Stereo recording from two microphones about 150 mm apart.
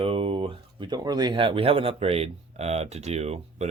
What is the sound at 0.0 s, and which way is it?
Speech, 40° right (ahead or behind).